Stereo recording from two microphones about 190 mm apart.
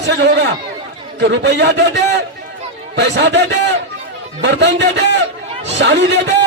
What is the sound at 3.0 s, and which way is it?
A man's voice, 65° right (ahead or behind).